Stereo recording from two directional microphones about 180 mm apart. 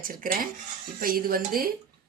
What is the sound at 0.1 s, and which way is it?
Speech, 50° right (ahead or behind).